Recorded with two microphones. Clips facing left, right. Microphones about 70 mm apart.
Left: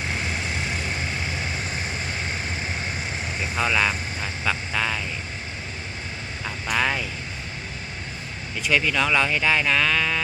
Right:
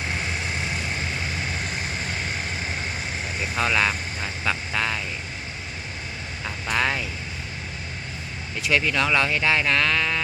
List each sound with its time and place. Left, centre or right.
3.5 s vehicle: centre
6.4 s vehicle: centre
8.6 s speech: centre